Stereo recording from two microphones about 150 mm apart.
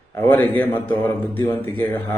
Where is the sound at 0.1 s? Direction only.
15° left (ahead or behind).